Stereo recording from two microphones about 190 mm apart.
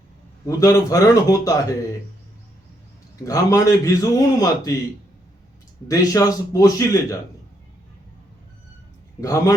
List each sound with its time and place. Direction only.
0.4 s a man's voice: 15° left (ahead or behind)
3.2 s a man's voice: 20° left (ahead or behind)
5.9 s a man's voice: 20° left (ahead or behind)
9.2 s a man's voice: 15° left (ahead or behind)